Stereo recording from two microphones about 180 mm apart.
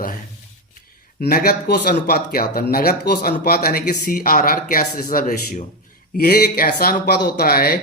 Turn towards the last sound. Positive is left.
turn(degrees=60)  # may be behind; listen again after turning